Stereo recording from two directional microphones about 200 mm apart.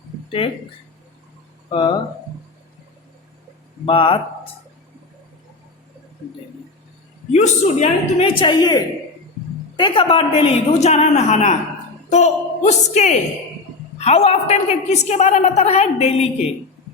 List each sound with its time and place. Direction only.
0.3 s speech: 25° left (ahead or behind)
1.7 s a woman's voice: 25° left (ahead or behind)
3.8 s a woman's voice: 25° left (ahead or behind)
7.3 s a woman's voice: 35° left (ahead or behind)
8.4 s a woman's voice: 20° left (ahead or behind)